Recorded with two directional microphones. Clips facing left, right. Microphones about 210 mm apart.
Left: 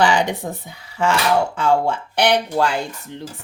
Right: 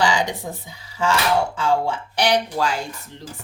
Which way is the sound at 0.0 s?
60° left (ahead or behind).